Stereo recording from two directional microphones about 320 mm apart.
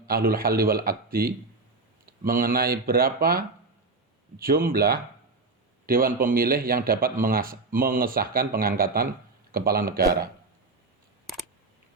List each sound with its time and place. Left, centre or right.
0.1 s a man's voice: right